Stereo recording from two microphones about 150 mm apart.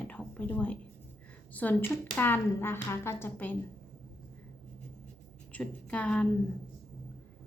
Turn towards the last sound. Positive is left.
turn(degrees=10)  # may be behind; listen again after turning